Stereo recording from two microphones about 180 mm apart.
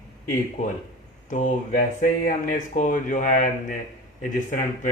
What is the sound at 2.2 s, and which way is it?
Speech, 50° left (ahead or behind).